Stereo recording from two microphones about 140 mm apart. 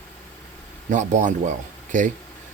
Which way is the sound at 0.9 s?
60° right (ahead or behind).